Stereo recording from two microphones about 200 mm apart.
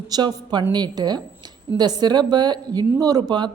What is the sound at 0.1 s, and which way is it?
A woman's voice, 20° right (ahead or behind).